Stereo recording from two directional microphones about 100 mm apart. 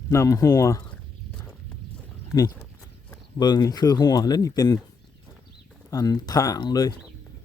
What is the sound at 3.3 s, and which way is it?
Speech, 40° left (ahead or behind).